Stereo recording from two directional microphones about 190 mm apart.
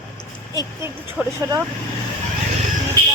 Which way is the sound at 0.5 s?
10° right (ahead or behind).